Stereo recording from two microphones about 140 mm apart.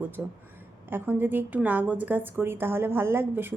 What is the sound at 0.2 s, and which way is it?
A woman's voice, 10° right (ahead or behind).